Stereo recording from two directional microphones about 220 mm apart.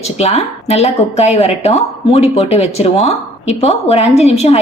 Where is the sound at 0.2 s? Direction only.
30° left (ahead or behind).